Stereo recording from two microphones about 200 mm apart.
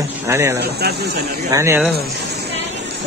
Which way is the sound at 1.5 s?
15° right (ahead or behind).